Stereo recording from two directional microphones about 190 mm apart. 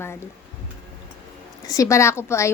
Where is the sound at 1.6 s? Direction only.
15° left (ahead or behind).